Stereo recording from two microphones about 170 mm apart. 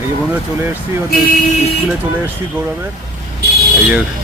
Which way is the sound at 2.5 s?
15° right (ahead or behind).